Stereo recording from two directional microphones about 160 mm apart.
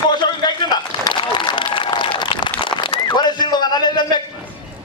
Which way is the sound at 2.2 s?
30° left (ahead or behind).